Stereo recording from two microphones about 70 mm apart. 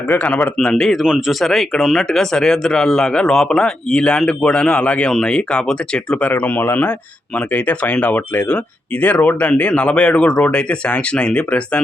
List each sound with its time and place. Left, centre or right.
0.1 s speech: left
0.5 s speech: centre
2.0 s speech: centre